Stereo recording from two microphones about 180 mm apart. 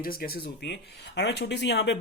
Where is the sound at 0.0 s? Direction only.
55° left (ahead or behind).